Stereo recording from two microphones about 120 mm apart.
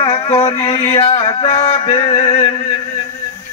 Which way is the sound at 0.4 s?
60° left (ahead or behind).